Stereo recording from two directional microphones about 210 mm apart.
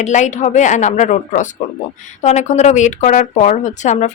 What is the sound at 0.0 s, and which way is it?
A woman's voice, 35° left (ahead or behind).